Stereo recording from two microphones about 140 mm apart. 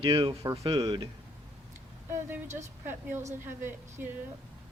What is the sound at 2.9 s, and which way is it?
A woman's voice, 15° right (ahead or behind).